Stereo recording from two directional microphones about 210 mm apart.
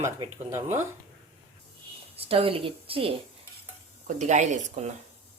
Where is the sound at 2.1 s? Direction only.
25° right (ahead or behind).